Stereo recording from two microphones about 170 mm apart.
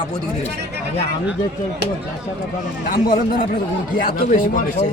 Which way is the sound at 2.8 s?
50° left (ahead or behind).